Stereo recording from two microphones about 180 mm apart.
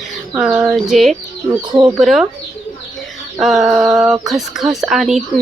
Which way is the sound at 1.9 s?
Centre (ahead or behind).